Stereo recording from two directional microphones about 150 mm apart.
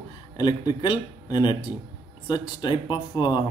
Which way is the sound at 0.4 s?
30° left (ahead or behind).